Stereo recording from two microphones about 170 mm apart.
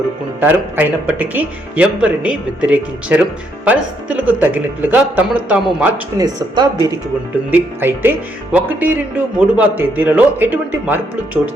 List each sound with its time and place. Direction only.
0.3 s speech: 10° right (ahead or behind)
6.1 s speech: 20° right (ahead or behind)
7.5 s speech: 10° right (ahead or behind)